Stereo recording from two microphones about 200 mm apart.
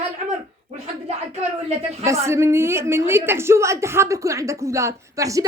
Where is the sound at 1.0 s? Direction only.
30° right (ahead or behind).